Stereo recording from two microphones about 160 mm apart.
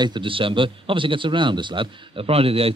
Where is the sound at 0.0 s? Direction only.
30° right (ahead or behind).